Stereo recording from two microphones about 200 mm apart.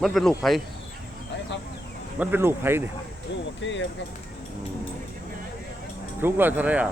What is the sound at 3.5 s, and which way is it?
Speech, 65° left (ahead or behind).